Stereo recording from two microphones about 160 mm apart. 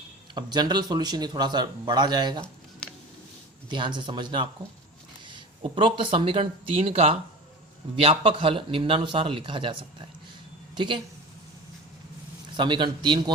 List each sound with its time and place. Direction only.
0.3 s speech: 25° right (ahead or behind)
3.7 s a man's voice: 30° right (ahead or behind)
10.8 s speech: 30° right (ahead or behind)
12.5 s speech: 30° right (ahead or behind)